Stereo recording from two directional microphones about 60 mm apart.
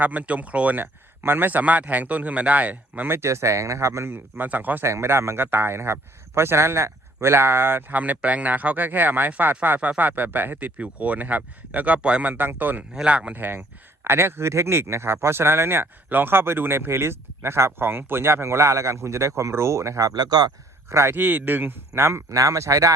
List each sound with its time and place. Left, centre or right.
0.0 s speech: right
1.2 s speech: right
3.1 s speech: right
4.4 s speech: right
4.8 s a man's voice: right
13.1 s speech: right
13.3 s a man's voice: right
20.9 s speech: right
21.2 s a man's voice: right
22.3 s speech: right